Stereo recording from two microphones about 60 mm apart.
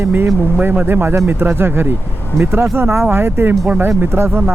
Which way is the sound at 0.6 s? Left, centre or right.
Right.